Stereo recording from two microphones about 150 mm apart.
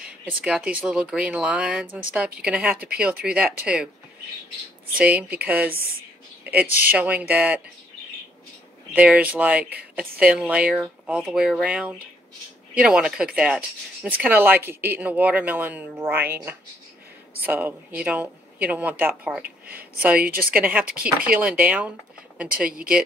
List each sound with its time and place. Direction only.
0.0 s a sound: 10° right (ahead or behind)
0.5 s speech: 5° right (ahead or behind)
4.9 s speech: 10° right (ahead or behind)
8.9 s speech: 10° right (ahead or behind)
19.4 s speech: 90° right
20.0 s speech: 10° right (ahead or behind)